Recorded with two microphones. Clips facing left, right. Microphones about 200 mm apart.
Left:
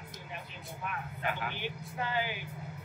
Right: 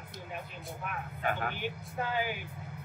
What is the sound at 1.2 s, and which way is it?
Speech, 45° right (ahead or behind).